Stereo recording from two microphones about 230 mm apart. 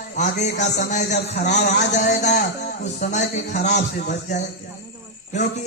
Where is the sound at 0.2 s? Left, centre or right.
Left.